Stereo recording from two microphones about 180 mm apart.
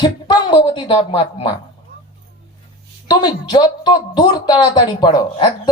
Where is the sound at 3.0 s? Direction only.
25° left (ahead or behind).